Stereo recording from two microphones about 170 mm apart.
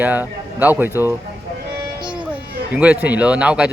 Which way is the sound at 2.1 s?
10° right (ahead or behind).